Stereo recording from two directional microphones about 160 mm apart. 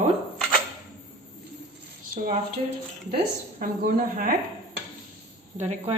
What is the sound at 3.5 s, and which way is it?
Speech, 55° right (ahead or behind).